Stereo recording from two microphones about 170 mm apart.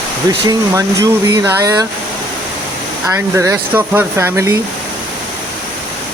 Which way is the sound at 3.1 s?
15° right (ahead or behind).